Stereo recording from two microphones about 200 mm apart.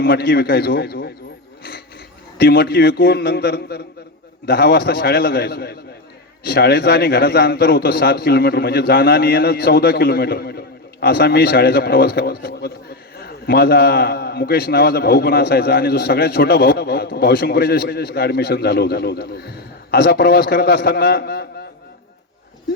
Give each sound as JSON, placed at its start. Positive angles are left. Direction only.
{"t": 0.0, "sound": "a man's voice", "side_deg": 50}
{"t": 2.4, "sound": "a man's voice", "side_deg": 50}